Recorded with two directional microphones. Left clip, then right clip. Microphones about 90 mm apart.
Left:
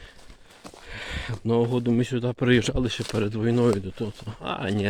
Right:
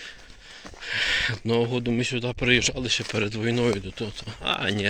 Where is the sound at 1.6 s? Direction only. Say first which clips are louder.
Left 4 dB; 90° left.